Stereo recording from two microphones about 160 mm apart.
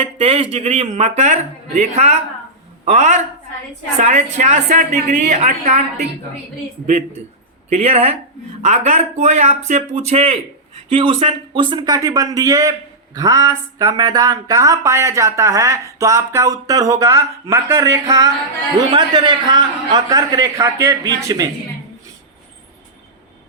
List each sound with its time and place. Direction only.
0.0 s a woman's voice: 40° right (ahead or behind)
6.8 s a woman's voice: 45° right (ahead or behind); by 21.5 s 20° right (ahead or behind)